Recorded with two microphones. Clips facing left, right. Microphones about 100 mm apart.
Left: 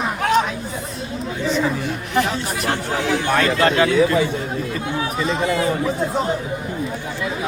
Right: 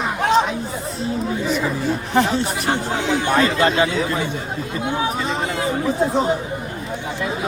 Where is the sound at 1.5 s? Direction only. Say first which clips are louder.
Left 4 dB; 10° right (ahead or behind).